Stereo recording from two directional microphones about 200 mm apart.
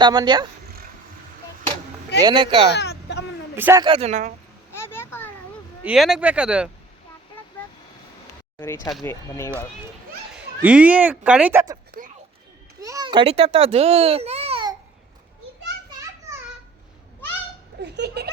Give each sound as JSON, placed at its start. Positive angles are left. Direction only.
{"t": 0.0, "sound": "speech", "side_deg": -20}
{"t": 2.2, "sound": "speech", "side_deg": -25}
{"t": 2.7, "sound": "a sound", "side_deg": 55}
{"t": 3.5, "sound": "speech", "side_deg": -10}
{"t": 3.8, "sound": "speech", "side_deg": -30}
{"t": 4.7, "sound": "a sound", "side_deg": 10}
{"t": 5.8, "sound": "speech", "side_deg": -5}
{"t": 8.6, "sound": "speech", "side_deg": 15}
{"t": 10.6, "sound": "speech", "side_deg": -5}
{"t": 12.0, "sound": "a sound", "side_deg": -45}
{"t": 12.8, "sound": "a child's voice", "side_deg": -20}
{"t": 17.8, "sound": "a sound", "side_deg": -55}